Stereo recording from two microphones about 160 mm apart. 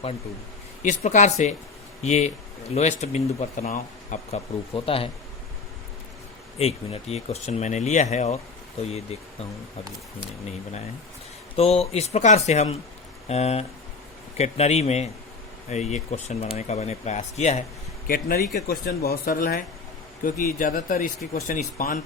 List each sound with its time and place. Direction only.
0.8 s speech: 50° left (ahead or behind)
6.6 s speech: 40° left (ahead or behind)
11.5 s speech: 40° left (ahead or behind)
18.1 s speech: 65° left (ahead or behind)
18.5 s speech: 80° left; by 22.0 s 50° left (ahead or behind)